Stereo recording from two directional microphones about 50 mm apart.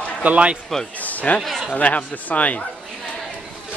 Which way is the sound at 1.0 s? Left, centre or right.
Left.